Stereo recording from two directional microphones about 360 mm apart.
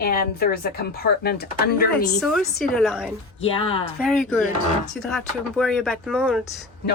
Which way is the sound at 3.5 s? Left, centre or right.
Centre.